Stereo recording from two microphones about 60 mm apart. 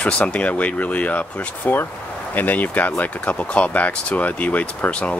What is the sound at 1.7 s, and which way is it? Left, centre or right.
Speech, left.